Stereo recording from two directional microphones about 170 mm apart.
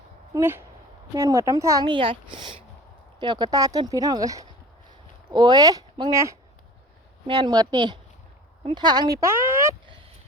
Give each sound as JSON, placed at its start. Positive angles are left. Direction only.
{"t": 0.3, "sound": "a woman's voice", "side_deg": -15}